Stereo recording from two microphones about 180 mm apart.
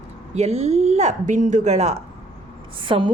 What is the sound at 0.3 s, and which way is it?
A woman's voice, 35° right (ahead or behind).